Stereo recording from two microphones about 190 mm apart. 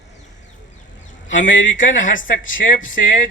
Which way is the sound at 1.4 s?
80° left.